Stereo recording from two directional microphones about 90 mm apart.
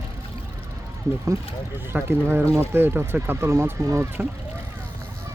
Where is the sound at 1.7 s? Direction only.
25° right (ahead or behind).